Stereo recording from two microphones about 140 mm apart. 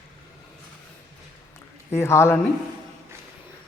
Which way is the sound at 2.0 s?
20° left (ahead or behind).